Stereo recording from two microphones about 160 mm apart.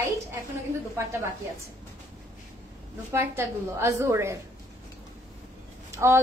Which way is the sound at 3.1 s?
15° right (ahead or behind).